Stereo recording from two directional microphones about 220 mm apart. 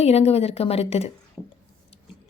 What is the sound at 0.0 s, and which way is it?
Speech, 30° left (ahead or behind).